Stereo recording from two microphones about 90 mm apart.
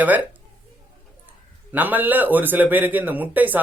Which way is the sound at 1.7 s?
20° right (ahead or behind).